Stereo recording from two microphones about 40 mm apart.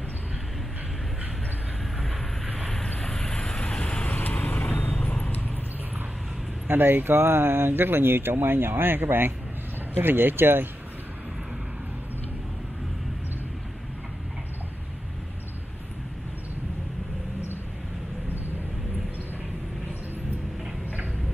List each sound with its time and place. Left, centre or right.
2.8 s vehicle: centre
4.2 s vehicle: left
4.8 s vehicle: left
6.7 s speech: right